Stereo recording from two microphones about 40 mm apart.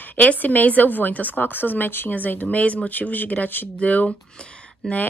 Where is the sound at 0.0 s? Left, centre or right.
Left.